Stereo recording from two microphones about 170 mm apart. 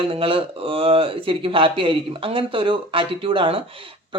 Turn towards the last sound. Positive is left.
turn(degrees=-30)  # may be behind; listen again after turning